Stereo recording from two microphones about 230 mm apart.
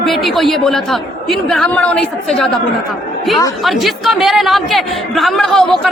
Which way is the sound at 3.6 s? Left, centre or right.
Centre.